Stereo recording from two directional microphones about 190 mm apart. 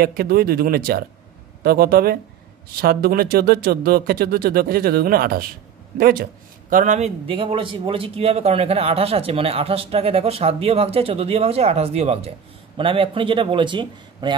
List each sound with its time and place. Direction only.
0.0 s speech: 50° right (ahead or behind)
6.7 s a man's voice: 40° right (ahead or behind); by 14.3 s 25° right (ahead or behind)